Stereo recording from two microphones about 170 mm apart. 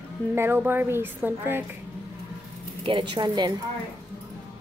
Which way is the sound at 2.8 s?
25° right (ahead or behind).